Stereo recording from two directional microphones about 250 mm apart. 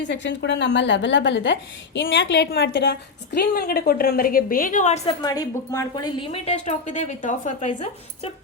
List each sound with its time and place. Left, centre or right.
0.0 s a woman's voice: left
5.2 s a woman's voice: centre